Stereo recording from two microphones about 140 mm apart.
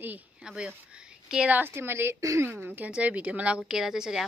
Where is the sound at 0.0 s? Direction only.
10° right (ahead or behind).